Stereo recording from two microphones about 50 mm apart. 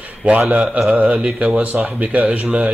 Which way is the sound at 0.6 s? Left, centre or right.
Centre.